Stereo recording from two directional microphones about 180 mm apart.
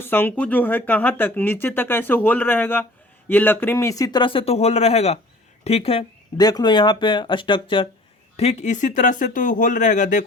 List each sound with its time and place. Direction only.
0.0 s speech: 10° left (ahead or behind); by 10.2 s 45° left (ahead or behind)